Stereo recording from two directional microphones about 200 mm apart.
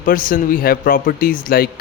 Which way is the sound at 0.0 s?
45° left (ahead or behind).